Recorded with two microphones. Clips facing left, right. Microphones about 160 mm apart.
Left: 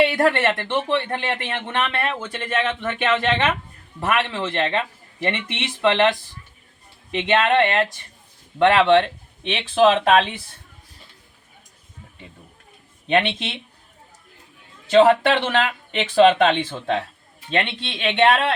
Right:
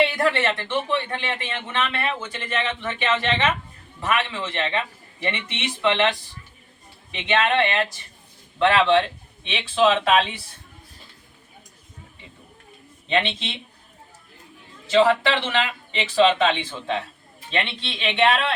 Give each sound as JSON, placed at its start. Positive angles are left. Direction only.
{"t": 0.1, "sound": "speech", "side_deg": 55}
{"t": 7.1, "sound": "speech", "side_deg": 55}
{"t": 13.1, "sound": "speech", "side_deg": 55}
{"t": 14.8, "sound": "speech", "side_deg": 55}